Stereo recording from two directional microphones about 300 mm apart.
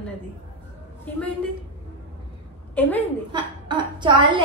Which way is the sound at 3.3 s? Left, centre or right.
Centre.